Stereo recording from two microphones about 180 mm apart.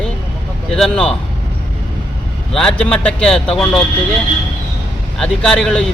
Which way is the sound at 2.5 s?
5° left (ahead or behind).